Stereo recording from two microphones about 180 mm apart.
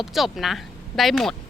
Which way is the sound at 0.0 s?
Centre (ahead or behind).